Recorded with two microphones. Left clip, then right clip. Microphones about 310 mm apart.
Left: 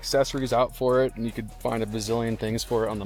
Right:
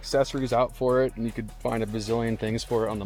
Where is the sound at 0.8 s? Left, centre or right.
Left.